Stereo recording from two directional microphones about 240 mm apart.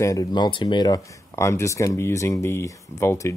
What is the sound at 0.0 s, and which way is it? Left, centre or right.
Speech, centre.